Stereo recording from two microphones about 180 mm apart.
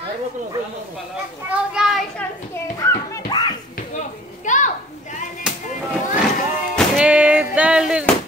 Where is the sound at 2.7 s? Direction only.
20° left (ahead or behind).